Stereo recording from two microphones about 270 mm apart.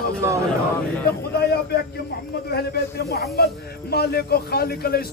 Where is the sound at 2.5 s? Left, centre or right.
Left.